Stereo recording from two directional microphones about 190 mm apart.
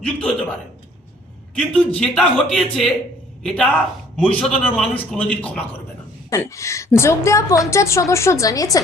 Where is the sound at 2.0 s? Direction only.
5° left (ahead or behind).